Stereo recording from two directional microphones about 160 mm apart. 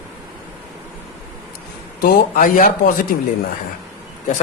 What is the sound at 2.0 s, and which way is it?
Speech, 60° left (ahead or behind).